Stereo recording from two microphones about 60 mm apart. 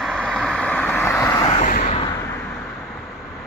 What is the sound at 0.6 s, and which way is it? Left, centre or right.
Vehicle, left.